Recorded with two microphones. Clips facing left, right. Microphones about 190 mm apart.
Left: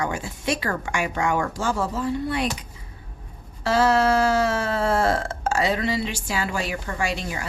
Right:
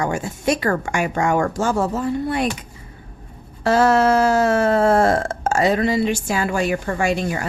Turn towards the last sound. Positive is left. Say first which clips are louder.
# right 7 dB
turn(degrees=-50)  # may be behind; listen again after turning